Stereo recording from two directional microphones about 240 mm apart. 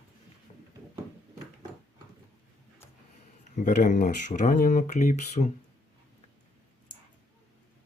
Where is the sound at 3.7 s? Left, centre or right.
Left.